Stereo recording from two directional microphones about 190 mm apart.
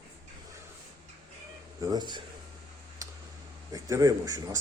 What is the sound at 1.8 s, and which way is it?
Speech, 20° right (ahead or behind).